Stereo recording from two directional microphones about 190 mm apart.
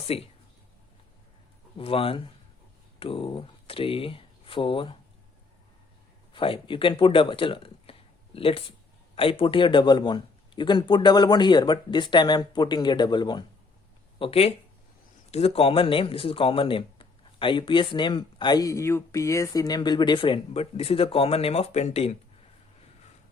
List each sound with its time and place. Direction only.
0.1 s speech: 30° left (ahead or behind)
1.8 s speech: 30° left (ahead or behind)
6.3 s speech: 25° left (ahead or behind)